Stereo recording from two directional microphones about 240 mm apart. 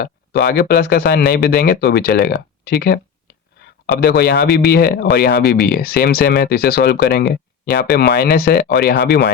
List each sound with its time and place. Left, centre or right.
0.0 s speech: left